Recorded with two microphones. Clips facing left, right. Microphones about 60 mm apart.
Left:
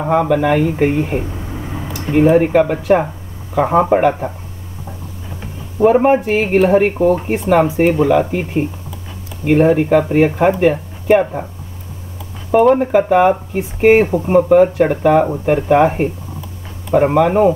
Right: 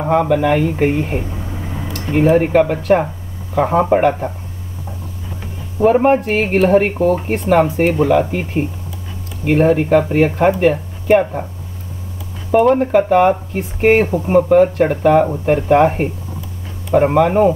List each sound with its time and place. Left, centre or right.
0.0 s speech: centre
1.9 s a sound: centre
2.1 s speech: centre
5.8 s speech: centre
12.5 s speech: centre